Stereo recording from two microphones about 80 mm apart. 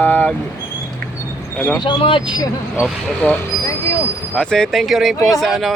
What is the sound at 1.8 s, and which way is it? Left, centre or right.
Speech, left.